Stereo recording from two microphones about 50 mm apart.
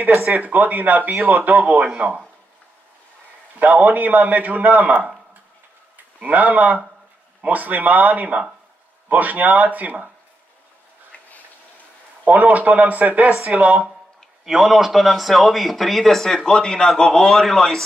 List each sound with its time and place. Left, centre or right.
0.4 s a man's voice: right
3.5 s a man's voice: right
6.1 s a man's voice: right
12.3 s a man's voice: right
14.4 s speech: centre